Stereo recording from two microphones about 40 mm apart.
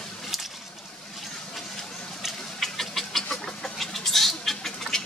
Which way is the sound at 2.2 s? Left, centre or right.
Centre.